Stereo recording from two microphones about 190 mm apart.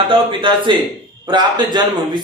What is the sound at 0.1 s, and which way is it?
Speech, 25° right (ahead or behind).